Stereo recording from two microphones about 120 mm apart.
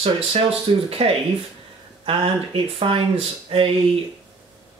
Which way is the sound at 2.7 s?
50° right (ahead or behind).